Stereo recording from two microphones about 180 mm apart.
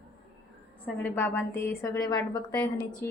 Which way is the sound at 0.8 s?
10° left (ahead or behind).